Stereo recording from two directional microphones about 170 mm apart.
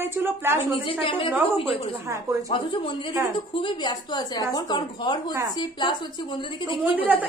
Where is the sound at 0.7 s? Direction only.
30° left (ahead or behind).